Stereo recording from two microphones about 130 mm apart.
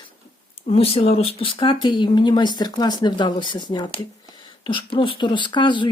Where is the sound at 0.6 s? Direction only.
50° left (ahead or behind).